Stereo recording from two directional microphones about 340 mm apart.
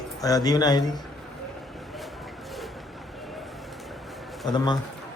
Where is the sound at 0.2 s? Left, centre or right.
Centre.